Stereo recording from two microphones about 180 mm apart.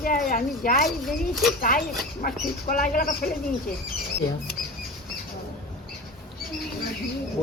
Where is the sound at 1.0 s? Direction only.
Centre (ahead or behind).